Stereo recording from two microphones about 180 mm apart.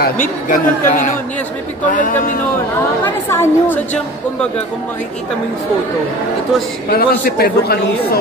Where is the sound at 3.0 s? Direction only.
15° left (ahead or behind).